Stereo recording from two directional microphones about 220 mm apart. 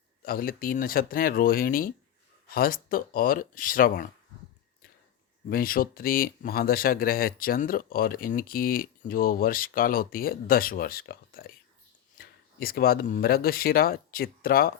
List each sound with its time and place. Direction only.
0.2 s speech: 40° left (ahead or behind)
5.5 s speech: 40° left (ahead or behind)